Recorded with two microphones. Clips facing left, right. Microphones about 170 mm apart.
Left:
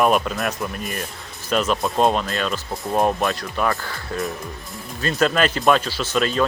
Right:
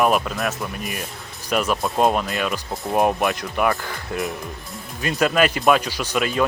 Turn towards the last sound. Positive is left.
turn(degrees=-10)  # may be behind; listen again after turning